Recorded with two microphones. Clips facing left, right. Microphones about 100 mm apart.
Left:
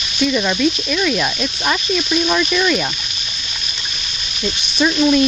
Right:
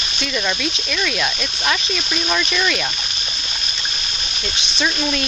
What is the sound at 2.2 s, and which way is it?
Speech, 10° left (ahead or behind).